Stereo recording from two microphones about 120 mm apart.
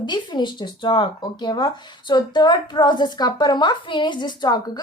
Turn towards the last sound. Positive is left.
turn(degrees=35)  # may be behind; listen again after turning